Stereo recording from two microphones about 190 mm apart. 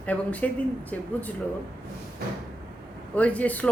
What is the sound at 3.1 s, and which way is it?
Speech, 5° left (ahead or behind).